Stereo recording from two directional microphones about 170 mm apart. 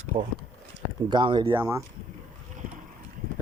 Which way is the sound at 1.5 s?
15° right (ahead or behind).